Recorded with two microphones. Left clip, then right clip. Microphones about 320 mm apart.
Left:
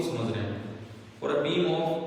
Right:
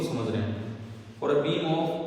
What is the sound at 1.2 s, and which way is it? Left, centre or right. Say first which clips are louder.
Speech: right 2 dB; centre.